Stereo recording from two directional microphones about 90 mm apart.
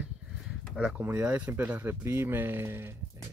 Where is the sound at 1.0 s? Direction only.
25° right (ahead or behind).